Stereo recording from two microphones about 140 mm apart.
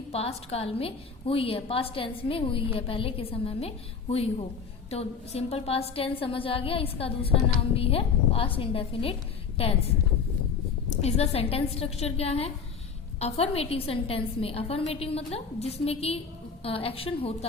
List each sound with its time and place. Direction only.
0.1 s a woman's voice: 45° left (ahead or behind)
10.8 s a woman's voice: 50° left (ahead or behind)